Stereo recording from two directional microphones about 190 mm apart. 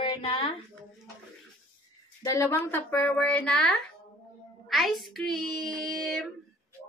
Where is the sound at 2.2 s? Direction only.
15° left (ahead or behind).